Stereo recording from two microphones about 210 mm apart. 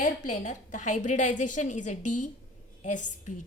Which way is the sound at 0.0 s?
35° left (ahead or behind).